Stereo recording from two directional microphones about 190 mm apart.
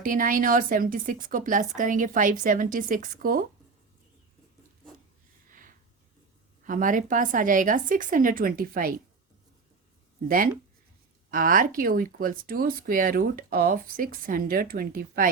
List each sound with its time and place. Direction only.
0.0 s speech: 45° right (ahead or behind)
5.5 s a sound: 45° right (ahead or behind)
6.7 s speech: 45° right (ahead or behind)
10.2 s speech: 50° right (ahead or behind)